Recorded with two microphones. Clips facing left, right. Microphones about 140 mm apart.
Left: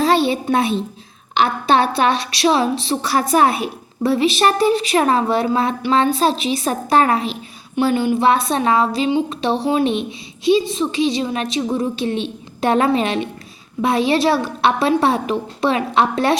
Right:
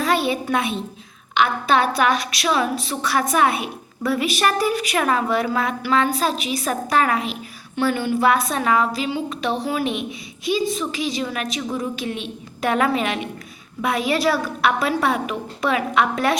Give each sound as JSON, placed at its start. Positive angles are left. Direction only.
{"t": 0.0, "sound": "a sound", "side_deg": 30}
{"t": 1.3, "sound": "a woman's voice", "side_deg": 30}
{"t": 7.8, "sound": "a woman's voice", "side_deg": 20}